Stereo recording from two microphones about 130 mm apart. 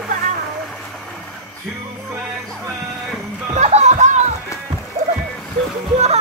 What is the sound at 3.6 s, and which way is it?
Music, 60° right (ahead or behind).